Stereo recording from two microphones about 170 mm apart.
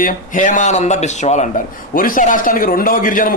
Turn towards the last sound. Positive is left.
turn(degrees=55)  # may be behind; listen again after turning